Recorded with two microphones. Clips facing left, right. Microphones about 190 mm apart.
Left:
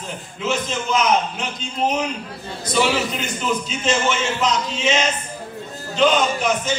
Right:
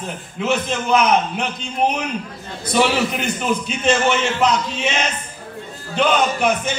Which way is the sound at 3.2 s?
60° right (ahead or behind).